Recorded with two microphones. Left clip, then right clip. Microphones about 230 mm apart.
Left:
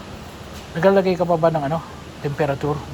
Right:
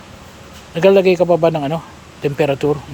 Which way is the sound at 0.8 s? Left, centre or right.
Right.